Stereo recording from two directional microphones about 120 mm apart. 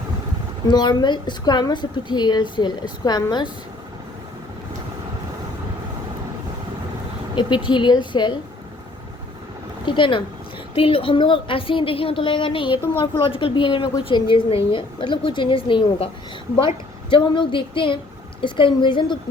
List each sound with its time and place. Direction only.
0.7 s a woman's voice: 35° left (ahead or behind)
7.3 s a woman's voice: 40° left (ahead or behind)
9.8 s a woman's voice: 40° left (ahead or behind)
12.7 s a woman's voice: 20° right (ahead or behind)
13.0 s a woman's voice: 45° left (ahead or behind)